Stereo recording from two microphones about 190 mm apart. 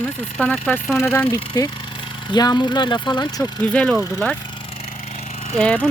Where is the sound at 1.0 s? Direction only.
15° left (ahead or behind).